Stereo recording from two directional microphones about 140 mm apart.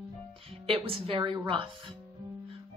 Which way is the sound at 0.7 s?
40° right (ahead or behind).